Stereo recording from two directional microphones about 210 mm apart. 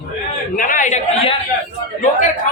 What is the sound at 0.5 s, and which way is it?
Speech, 40° left (ahead or behind).